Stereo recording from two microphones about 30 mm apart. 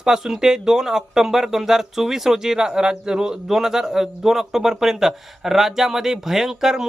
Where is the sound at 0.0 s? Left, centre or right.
Right.